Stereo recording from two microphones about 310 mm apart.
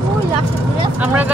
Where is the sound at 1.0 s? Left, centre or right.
Centre.